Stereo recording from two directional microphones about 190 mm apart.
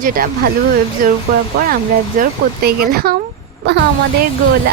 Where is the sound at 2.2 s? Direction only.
55° right (ahead or behind).